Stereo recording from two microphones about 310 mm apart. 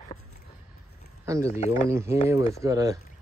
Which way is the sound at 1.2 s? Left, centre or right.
Centre.